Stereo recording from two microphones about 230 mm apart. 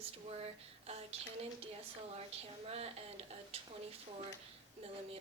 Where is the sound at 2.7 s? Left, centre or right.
Right.